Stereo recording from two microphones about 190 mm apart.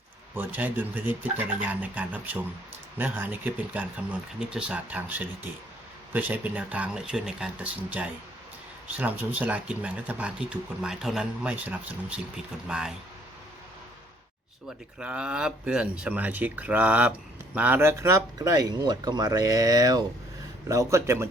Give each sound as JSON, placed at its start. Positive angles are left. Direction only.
{"t": 0.3, "sound": "speech", "side_deg": -10}
{"t": 14.9, "sound": "speech", "side_deg": -5}